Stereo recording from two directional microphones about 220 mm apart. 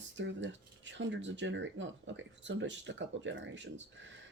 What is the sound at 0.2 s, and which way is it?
Speech, 55° right (ahead or behind).